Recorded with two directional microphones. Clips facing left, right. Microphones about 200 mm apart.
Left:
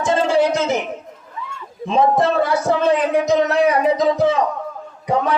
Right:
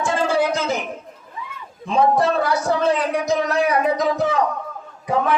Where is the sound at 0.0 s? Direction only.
20° left (ahead or behind).